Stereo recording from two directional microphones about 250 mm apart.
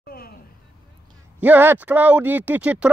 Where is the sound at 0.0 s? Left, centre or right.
Left.